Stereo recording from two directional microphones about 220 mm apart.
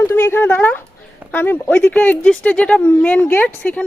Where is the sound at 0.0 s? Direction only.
10° left (ahead or behind).